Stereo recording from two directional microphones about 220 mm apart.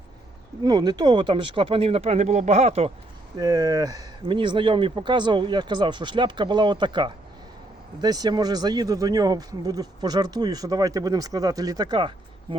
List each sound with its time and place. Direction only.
0.6 s speech: 20° right (ahead or behind)
3.3 s speech: 15° right (ahead or behind)